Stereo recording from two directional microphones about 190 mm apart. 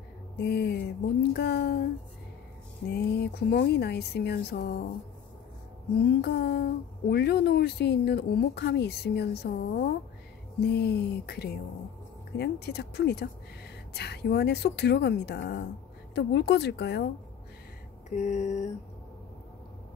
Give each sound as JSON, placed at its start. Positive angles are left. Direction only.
{"t": 0.4, "sound": "speech", "side_deg": 60}
{"t": 2.9, "sound": "speech", "side_deg": 60}
{"t": 5.9, "sound": "speech", "side_deg": 55}
{"t": 18.1, "sound": "a sound", "side_deg": 40}